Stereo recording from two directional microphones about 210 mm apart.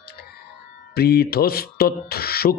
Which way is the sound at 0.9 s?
50° left (ahead or behind).